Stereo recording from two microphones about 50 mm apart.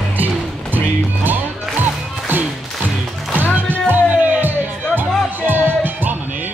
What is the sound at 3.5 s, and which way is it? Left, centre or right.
Music, right.